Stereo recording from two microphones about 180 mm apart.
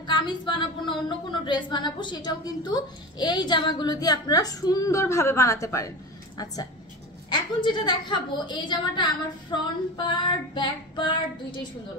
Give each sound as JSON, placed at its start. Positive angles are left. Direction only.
{"t": 0.0, "sound": "speech", "side_deg": 25}